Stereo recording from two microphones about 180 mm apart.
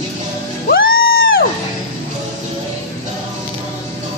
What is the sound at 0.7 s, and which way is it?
Music, 55° left (ahead or behind).